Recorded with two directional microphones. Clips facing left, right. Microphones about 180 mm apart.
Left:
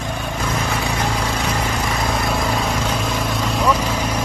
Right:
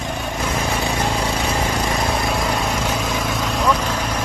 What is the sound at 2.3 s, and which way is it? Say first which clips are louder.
Vehicle: even; centre (ahead or behind).